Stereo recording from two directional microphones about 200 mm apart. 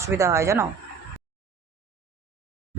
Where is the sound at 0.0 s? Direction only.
15° right (ahead or behind).